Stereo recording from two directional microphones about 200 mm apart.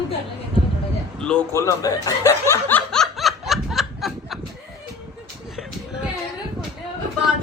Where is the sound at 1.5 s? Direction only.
15° left (ahead or behind); by 4.3 s centre (ahead or behind).